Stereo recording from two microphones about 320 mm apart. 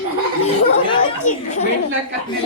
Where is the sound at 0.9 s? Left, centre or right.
Left.